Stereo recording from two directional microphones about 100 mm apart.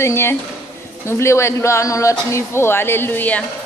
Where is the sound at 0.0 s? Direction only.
25° left (ahead or behind).